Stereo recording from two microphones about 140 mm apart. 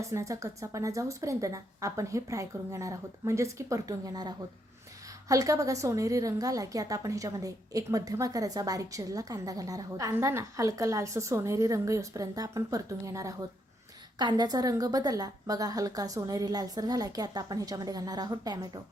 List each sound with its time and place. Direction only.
0.1 s a woman's voice: 20° right (ahead or behind)